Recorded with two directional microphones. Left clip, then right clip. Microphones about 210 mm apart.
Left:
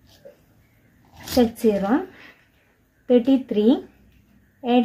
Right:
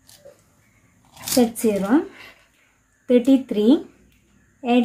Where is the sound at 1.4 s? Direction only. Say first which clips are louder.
Left 1 dB; 15° left (ahead or behind).